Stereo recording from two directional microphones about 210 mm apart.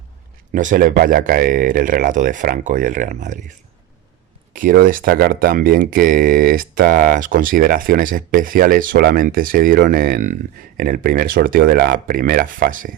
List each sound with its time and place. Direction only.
0.5 s speech: 40° right (ahead or behind)
4.5 s speech: 40° right (ahead or behind)